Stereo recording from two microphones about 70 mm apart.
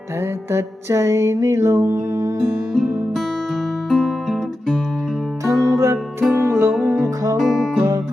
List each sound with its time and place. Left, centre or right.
0.5 s music: right
3.8 s music: centre
5.5 s music: right
7.3 s music: centre